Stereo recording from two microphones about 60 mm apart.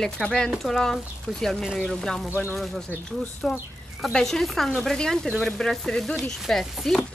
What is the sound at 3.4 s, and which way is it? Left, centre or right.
Speech, centre.